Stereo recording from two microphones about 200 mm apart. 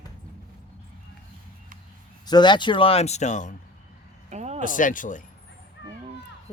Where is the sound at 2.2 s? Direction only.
20° left (ahead or behind); by 3.5 s 35° left (ahead or behind).